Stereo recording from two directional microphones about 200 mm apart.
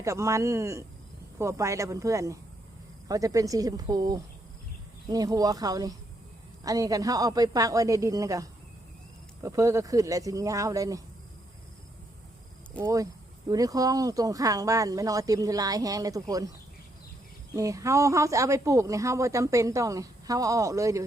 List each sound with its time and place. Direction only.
0.0 s speech: 15° right (ahead or behind)
12.8 s speech: 15° right (ahead or behind)
17.5 s speech: 15° right (ahead or behind)